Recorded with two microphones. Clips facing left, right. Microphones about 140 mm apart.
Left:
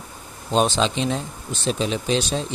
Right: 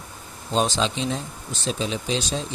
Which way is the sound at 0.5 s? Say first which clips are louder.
Left 3 dB; 65° left (ahead or behind).